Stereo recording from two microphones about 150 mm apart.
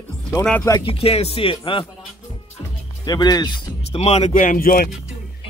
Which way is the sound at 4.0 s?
45° left (ahead or behind).